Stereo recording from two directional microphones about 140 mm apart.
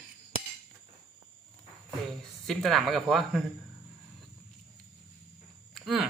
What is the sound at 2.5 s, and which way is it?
Speech, centre (ahead or behind).